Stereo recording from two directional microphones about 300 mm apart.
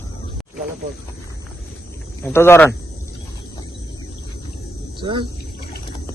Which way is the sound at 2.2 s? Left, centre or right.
Centre.